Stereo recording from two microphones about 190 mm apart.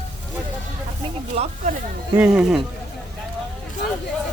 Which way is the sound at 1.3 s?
35° right (ahead or behind).